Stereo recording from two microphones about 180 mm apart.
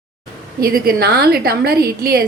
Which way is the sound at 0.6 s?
55° right (ahead or behind).